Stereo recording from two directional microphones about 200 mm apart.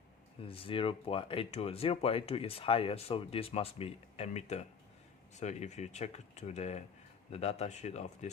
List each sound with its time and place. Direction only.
0.4 s speech: 25° left (ahead or behind)